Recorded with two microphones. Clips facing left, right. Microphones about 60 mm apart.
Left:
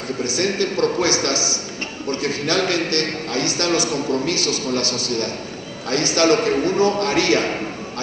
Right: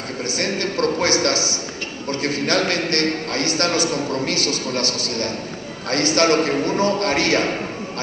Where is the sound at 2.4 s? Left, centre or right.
Right.